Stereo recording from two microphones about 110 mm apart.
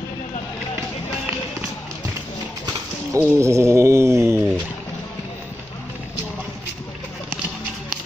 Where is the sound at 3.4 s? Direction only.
25° right (ahead or behind).